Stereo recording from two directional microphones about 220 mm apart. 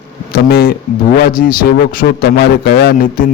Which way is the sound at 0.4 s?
45° left (ahead or behind).